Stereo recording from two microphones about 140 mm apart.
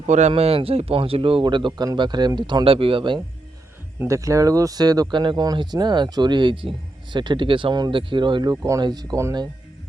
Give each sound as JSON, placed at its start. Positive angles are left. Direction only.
{"t": 0.1, "sound": "speech", "side_deg": -55}
{"t": 4.0, "sound": "speech", "side_deg": -20}